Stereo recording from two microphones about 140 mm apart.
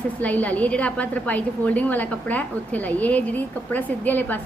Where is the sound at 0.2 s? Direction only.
10° left (ahead or behind).